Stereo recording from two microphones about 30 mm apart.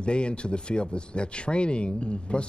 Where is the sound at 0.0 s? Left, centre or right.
Left.